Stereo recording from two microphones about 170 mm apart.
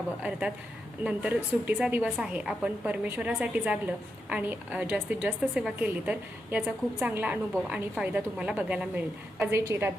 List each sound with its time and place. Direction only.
0.2 s a woman's voice: 5° right (ahead or behind)